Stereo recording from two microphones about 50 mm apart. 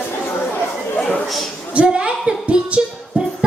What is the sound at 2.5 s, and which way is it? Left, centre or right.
Music, centre.